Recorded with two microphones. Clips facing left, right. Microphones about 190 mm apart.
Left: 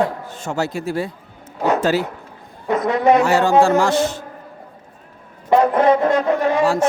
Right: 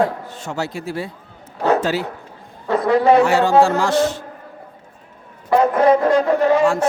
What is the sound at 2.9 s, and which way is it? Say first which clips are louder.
Speech: right 1 dB; 30° right (ahead or behind).